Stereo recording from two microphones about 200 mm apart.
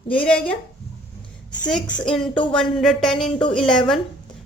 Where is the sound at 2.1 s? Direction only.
5° left (ahead or behind).